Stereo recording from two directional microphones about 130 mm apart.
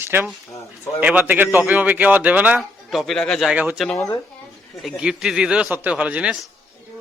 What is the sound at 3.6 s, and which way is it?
Speech, 10° right (ahead or behind).